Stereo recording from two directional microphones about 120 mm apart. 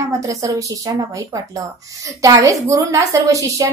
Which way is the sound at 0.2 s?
25° right (ahead or behind).